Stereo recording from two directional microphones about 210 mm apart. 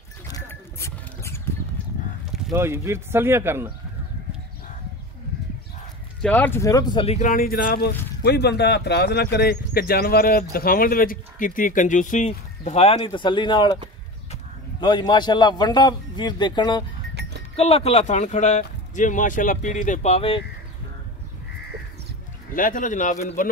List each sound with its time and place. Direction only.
0.3 s a sound: 10° left (ahead or behind)
2.5 s speech: 10° right (ahead or behind)
6.2 s a man's voice: 5° left (ahead or behind)
17.1 s livestock: 50° right (ahead or behind)
17.6 s speech: 30° left (ahead or behind)
22.5 s speech: 40° left (ahead or behind)